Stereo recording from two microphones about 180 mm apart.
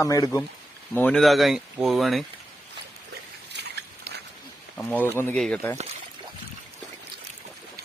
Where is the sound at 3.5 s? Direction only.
65° right (ahead or behind).